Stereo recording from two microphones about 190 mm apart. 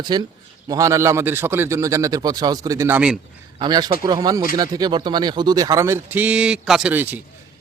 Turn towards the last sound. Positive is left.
turn(degrees=-10)  # may be behind; listen again after turning